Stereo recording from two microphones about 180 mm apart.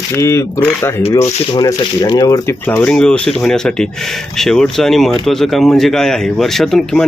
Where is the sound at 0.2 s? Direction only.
15° left (ahead or behind).